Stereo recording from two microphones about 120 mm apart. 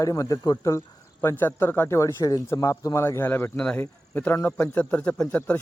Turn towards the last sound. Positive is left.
turn(degrees=10)  # may be behind; listen again after turning